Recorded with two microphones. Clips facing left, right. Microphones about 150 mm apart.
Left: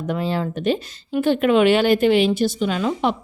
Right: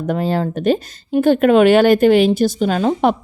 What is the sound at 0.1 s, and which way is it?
A woman's voice, 45° right (ahead or behind).